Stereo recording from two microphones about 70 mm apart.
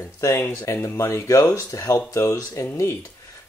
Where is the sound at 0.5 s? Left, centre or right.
Left.